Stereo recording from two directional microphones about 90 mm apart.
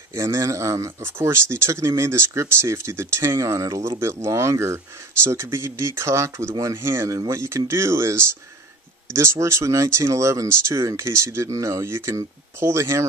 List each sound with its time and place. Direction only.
0.1 s speech: 30° right (ahead or behind)